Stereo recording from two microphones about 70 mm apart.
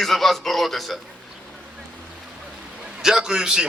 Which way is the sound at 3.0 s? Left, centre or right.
Centre.